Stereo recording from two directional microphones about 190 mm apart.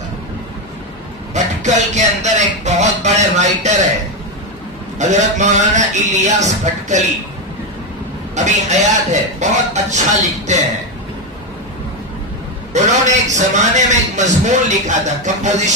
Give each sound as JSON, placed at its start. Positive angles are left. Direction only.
{"t": 1.3, "sound": "a sound", "side_deg": -40}
{"t": 4.9, "sound": "a man's voice", "side_deg": -40}
{"t": 8.4, "sound": "a man's voice", "side_deg": -40}
{"t": 12.7, "sound": "a man's voice", "side_deg": -40}